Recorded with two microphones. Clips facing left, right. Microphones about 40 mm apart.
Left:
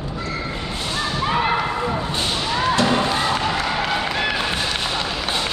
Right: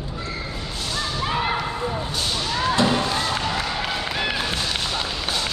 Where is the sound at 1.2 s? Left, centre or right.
Centre.